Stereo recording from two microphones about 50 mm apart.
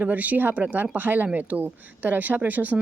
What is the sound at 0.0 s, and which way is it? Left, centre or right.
Speech, right.